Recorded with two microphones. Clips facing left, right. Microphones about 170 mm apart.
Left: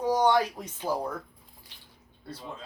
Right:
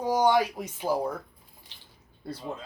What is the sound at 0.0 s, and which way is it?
Speech, 10° right (ahead or behind).